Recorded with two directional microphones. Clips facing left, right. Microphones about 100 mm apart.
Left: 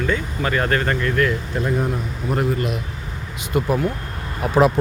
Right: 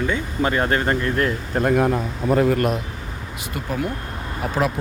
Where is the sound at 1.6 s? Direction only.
65° right (ahead or behind); by 2.0 s 80° right.